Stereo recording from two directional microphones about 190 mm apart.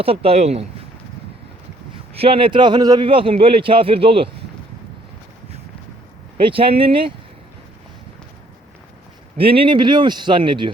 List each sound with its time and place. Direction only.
0.0 s speech: 30° right (ahead or behind)
2.1 s a man's voice: 30° right (ahead or behind)
6.4 s a man's voice: 30° right (ahead or behind)
9.4 s a man's voice: 30° right (ahead or behind)